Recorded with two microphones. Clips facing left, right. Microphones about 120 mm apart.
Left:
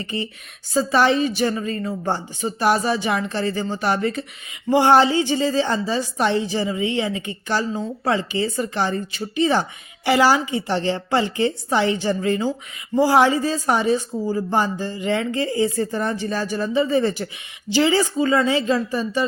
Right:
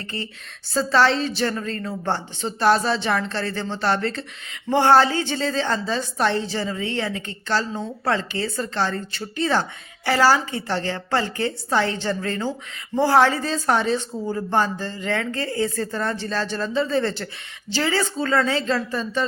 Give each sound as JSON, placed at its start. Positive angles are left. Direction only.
{"t": 0.0, "sound": "a woman's voice", "side_deg": 15}